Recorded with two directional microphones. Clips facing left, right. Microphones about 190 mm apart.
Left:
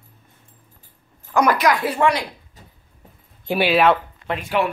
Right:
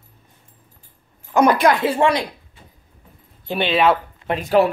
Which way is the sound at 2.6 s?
40° left (ahead or behind).